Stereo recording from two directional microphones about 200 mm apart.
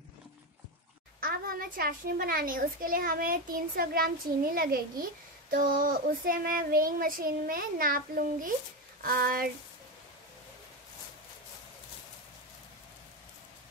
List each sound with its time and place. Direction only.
1.2 s a child's voice: 45° right (ahead or behind)